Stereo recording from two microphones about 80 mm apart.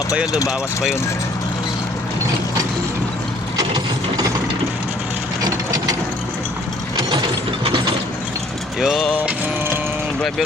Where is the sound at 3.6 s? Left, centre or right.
Right.